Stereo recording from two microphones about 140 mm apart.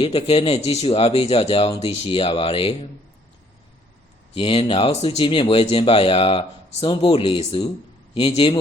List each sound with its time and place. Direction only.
0.0 s speech: 45° left (ahead or behind)
4.4 s speech: 40° left (ahead or behind)